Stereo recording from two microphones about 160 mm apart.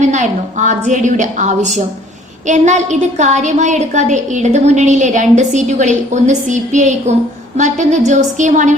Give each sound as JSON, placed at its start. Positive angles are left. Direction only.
{"t": 0.0, "sound": "a woman's voice", "side_deg": -50}